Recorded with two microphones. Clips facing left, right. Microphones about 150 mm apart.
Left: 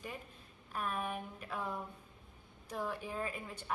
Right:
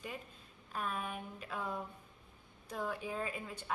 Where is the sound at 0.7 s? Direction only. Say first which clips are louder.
Left 1 dB; 10° left (ahead or behind).